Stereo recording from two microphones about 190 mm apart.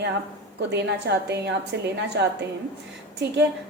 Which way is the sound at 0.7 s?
65° right (ahead or behind).